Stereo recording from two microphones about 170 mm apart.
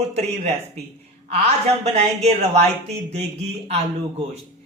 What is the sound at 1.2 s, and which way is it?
A woman's voice, 40° right (ahead or behind).